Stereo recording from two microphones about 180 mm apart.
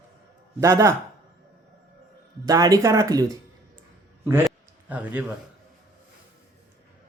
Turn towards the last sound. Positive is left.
turn(degrees=-10)  # may be behind; listen again after turning